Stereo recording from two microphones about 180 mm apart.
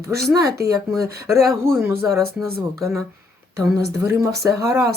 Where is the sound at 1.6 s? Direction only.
15° right (ahead or behind).